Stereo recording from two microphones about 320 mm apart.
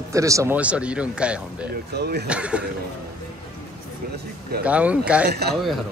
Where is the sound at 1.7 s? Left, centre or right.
Right.